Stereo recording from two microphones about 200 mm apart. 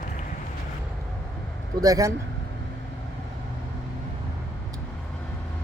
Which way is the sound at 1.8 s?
15° right (ahead or behind).